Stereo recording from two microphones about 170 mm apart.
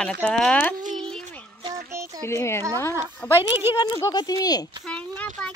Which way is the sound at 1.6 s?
20° right (ahead or behind).